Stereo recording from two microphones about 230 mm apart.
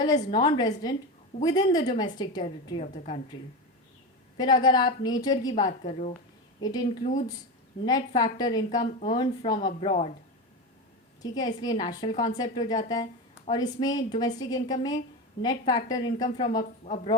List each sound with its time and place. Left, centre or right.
0.2 s a woman's voice: centre
4.4 s a woman's voice: centre
11.2 s a woman's voice: centre